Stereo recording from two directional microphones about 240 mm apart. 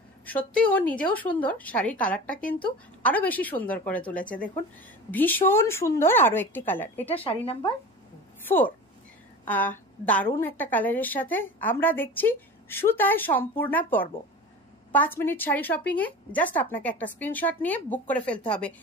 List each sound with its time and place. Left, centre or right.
0.2 s a woman's voice: centre
7.2 s speech: left
9.5 s a woman's voice: centre